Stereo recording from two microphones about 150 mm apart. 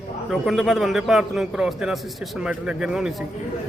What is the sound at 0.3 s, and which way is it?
A man's voice, centre (ahead or behind).